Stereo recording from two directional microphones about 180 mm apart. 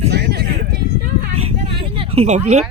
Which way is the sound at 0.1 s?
65° right (ahead or behind).